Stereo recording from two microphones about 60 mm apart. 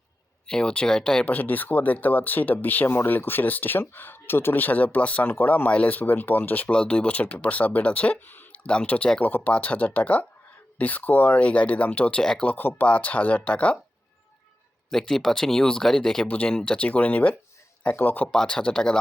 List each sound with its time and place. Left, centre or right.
0.4 s speech: centre
1.2 s speech: left
6.7 s speech: centre
8.6 s speech: centre
9.2 s speech: left
12.2 s speech: centre
12.5 s speech: left
14.8 s speech: centre
16.2 s speech: left
18.3 s speech: centre